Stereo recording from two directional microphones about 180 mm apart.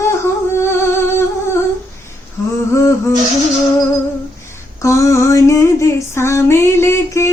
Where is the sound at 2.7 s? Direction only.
15° left (ahead or behind).